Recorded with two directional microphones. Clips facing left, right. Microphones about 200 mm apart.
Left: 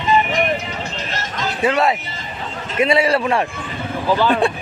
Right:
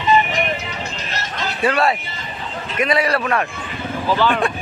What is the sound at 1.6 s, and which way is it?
Speech, 20° left (ahead or behind).